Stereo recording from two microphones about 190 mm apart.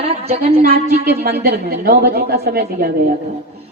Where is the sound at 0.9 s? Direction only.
55° right (ahead or behind).